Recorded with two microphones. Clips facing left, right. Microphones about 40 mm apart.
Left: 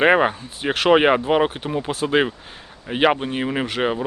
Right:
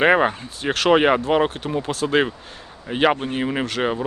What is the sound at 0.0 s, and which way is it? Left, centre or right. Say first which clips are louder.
Speech: even; centre.